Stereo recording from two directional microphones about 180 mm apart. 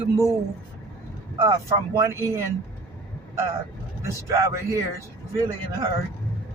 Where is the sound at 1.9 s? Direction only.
15° right (ahead or behind).